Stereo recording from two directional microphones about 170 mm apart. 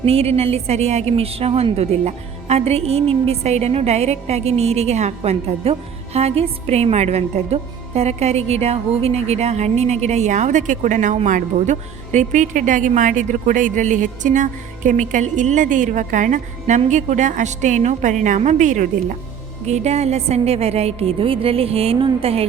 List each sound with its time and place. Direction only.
0.0 s a woman's voice: 35° right (ahead or behind)